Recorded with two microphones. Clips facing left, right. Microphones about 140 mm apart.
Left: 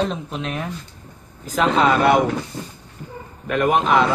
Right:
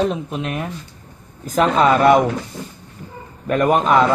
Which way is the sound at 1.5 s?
45° right (ahead or behind).